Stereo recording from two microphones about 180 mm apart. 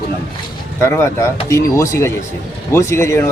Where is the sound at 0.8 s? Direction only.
15° left (ahead or behind).